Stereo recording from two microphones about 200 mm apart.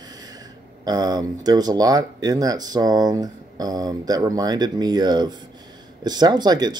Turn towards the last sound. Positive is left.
turn(degrees=-20)  # may be behind; listen again after turning